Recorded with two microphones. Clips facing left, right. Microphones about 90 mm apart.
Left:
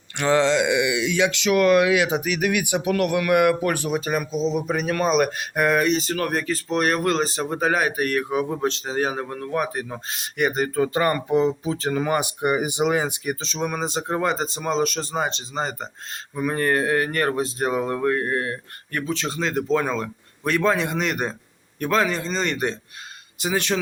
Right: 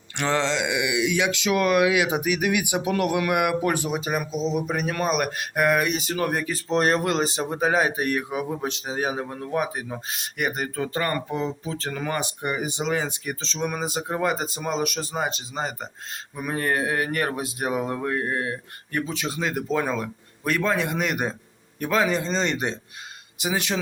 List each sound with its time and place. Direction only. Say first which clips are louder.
0.2 s speech: left 5 dB; 5° left (ahead or behind); by 6.6 s 15° right (ahead or behind)
6.7 s speech: right 2 dB; 30° right (ahead or behind)
7.0 s speech: left 2 dB; 20° right (ahead or behind)
10.8 s speech: left 6 dB; 15° left (ahead or behind)
13.6 s speech: even; 5° right (ahead or behind)